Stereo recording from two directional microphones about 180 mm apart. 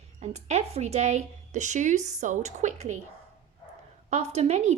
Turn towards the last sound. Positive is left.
turn(degrees=-35)  # may be behind; listen again after turning